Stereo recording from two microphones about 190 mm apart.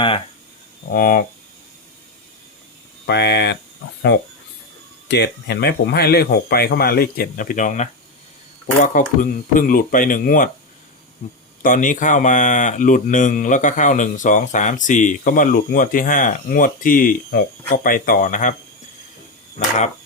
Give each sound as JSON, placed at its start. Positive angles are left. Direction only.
{"t": 0.9, "sound": "speech", "side_deg": 45}
{"t": 3.1, "sound": "speech", "side_deg": 60}
{"t": 5.0, "sound": "speech", "side_deg": 60}
{"t": 11.6, "sound": "speech", "side_deg": 45}
{"t": 19.5, "sound": "a sound", "side_deg": 40}